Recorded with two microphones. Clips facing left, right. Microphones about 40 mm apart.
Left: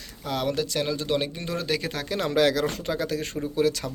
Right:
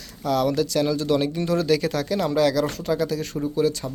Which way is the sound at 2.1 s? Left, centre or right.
Left.